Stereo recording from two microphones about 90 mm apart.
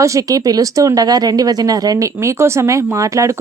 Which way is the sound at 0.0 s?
35° right (ahead or behind).